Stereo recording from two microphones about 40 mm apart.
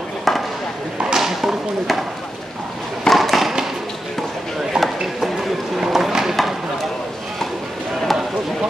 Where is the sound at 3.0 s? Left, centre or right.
Centre.